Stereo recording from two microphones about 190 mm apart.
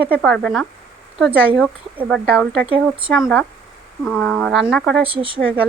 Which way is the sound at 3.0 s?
Centre (ahead or behind).